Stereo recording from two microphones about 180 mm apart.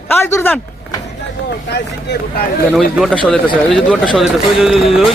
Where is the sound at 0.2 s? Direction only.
15° left (ahead or behind).